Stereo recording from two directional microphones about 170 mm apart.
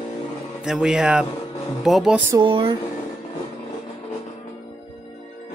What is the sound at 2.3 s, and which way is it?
Speech, 25° right (ahead or behind).